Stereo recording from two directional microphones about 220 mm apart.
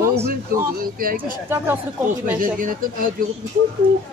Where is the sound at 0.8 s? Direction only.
40° right (ahead or behind).